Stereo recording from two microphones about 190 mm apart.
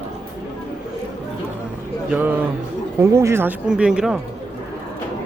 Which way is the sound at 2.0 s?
10° right (ahead or behind).